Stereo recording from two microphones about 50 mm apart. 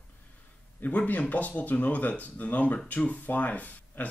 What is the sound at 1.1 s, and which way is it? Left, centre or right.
Speech, left.